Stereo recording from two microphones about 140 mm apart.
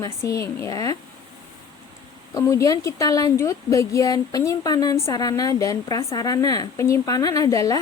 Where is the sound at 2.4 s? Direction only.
20° left (ahead or behind).